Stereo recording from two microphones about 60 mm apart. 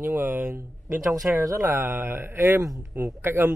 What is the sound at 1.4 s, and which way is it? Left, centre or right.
Speech, right.